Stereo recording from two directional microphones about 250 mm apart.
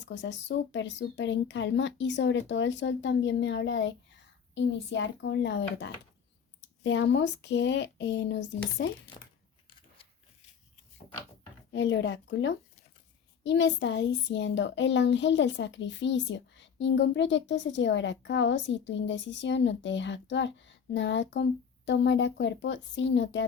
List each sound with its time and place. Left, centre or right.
0.0 s a child's voice: left
11.7 s a child's voice: left